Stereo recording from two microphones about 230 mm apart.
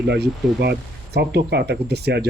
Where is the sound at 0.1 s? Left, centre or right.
Right.